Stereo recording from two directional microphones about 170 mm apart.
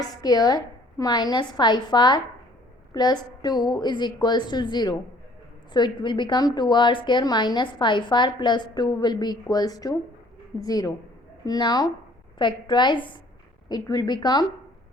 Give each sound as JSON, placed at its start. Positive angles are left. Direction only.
{"t": 0.0, "sound": "a woman's voice", "side_deg": 25}